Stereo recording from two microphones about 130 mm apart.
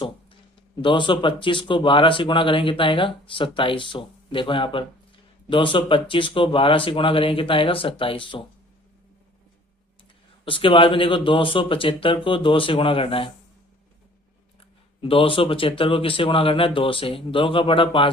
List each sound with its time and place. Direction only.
0.8 s speech: 40° left (ahead or behind)
10.4 s speech: 40° left (ahead or behind)
14.6 s speech: 45° left (ahead or behind)